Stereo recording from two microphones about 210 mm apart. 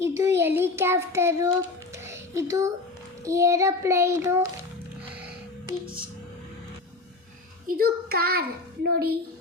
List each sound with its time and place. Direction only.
0.0 s child singing: 15° right (ahead or behind)
2.0 s a sound: 15° right (ahead or behind)
3.2 s child singing: 15° right (ahead or behind)
5.6 s music: 5° right (ahead or behind)
7.8 s a child's voice: 45° right (ahead or behind)